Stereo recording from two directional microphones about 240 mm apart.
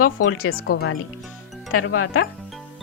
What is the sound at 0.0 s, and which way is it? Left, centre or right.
Speech, left.